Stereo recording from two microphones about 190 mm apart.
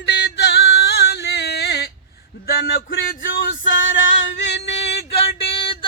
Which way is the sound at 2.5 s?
50° left (ahead or behind).